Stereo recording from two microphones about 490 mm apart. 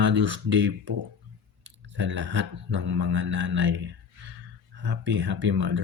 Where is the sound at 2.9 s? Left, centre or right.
Right.